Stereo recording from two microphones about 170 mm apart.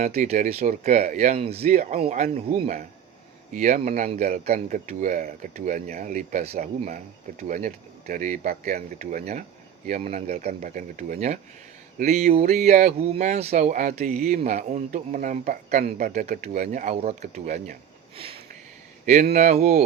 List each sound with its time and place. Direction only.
0.0 s speech: 40° right (ahead or behind)
1.7 s speech: 50° right (ahead or behind)
19.0 s speech: 45° right (ahead or behind)